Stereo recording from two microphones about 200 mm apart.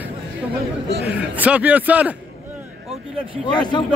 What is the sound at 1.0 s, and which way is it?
A man's voice, 10° right (ahead or behind).